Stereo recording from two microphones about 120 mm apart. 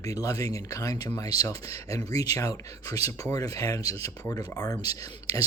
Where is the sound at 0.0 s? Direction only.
30° left (ahead or behind).